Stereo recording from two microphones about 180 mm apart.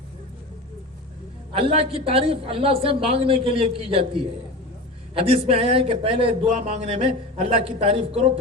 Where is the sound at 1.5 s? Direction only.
35° right (ahead or behind).